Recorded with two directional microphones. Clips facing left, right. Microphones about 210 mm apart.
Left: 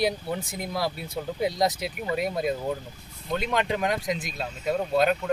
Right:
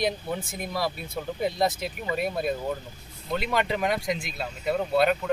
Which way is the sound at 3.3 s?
Centre (ahead or behind).